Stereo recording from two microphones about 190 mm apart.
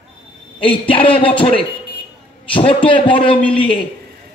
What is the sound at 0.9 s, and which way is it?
Speech, 30° left (ahead or behind).